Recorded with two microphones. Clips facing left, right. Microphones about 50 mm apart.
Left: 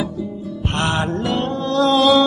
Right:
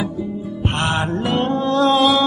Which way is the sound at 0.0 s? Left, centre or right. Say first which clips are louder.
Right 1 dB; right.